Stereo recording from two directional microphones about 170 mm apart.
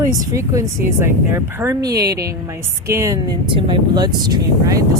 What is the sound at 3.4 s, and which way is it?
Speech, 30° right (ahead or behind).